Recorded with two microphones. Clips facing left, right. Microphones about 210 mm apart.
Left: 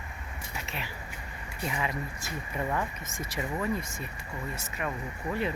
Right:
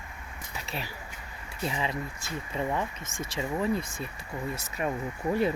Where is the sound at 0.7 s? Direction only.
35° right (ahead or behind).